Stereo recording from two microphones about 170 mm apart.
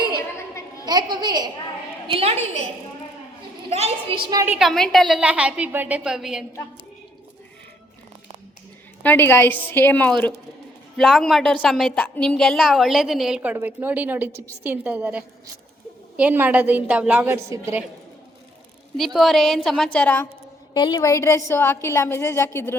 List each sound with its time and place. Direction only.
0.2 s chatter: 15° left (ahead or behind)
0.9 s a woman's voice: 25° right (ahead or behind)
2.0 s a woman's voice: 35° right (ahead or behind)
3.7 s a woman's voice: 35° right (ahead or behind)
4.4 s a woman's voice: 5° right (ahead or behind)
9.0 s a woman's voice: 15° left (ahead or behind); by 17.8 s 15° right (ahead or behind)
18.9 s a woman's voice: centre (ahead or behind)
20.7 s a woman's voice: 25° left (ahead or behind)